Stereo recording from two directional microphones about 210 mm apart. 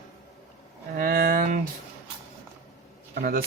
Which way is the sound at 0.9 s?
45° right (ahead or behind).